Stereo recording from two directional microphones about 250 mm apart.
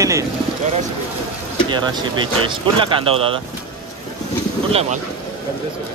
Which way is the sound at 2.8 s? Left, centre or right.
Right.